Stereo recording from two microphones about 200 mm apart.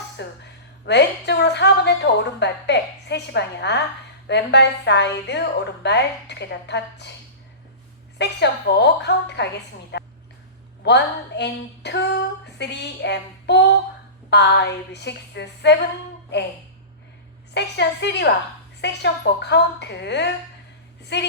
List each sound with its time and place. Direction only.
0.2 s a woman's voice: 60° left (ahead or behind)
8.2 s a woman's voice: 60° left (ahead or behind)
9.9 s a sound: 60° left (ahead or behind)
10.8 s a woman's voice: 60° left (ahead or behind)
17.5 s a woman's voice: 60° left (ahead or behind)